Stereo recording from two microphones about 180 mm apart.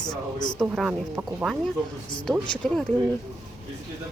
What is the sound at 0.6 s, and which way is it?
Speech, 5° right (ahead or behind).